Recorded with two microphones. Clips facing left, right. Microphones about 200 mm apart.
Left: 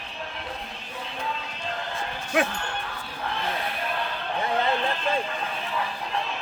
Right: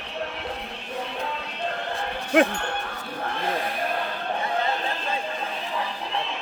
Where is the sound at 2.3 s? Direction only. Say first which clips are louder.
Right 5 dB; 55° right (ahead or behind).